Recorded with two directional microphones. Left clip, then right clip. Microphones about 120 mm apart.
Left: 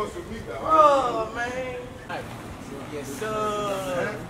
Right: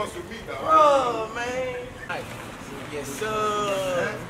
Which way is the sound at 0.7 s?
10° right (ahead or behind).